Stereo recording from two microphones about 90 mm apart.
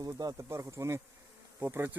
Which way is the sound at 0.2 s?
40° right (ahead or behind).